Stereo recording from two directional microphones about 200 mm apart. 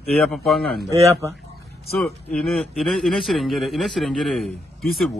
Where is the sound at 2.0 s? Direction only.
Centre (ahead or behind).